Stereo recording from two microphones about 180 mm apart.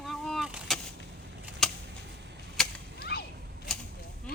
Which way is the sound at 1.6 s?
Centre (ahead or behind).